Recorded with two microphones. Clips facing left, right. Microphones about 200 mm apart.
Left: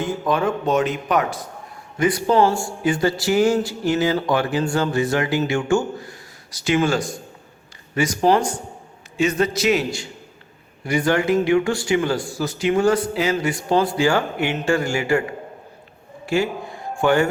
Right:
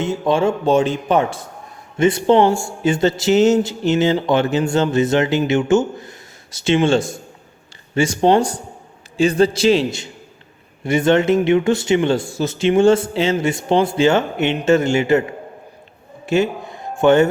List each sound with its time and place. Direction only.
0.0 s a man's voice: 25° right (ahead or behind)
16.2 s music: 20° right (ahead or behind)